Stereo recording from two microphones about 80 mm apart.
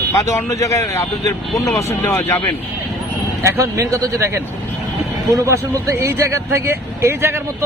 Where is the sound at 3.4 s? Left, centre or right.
Right.